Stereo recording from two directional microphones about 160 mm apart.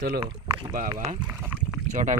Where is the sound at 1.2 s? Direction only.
10° right (ahead or behind).